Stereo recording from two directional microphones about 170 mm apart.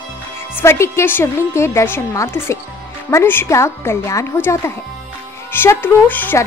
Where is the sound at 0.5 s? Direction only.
15° left (ahead or behind).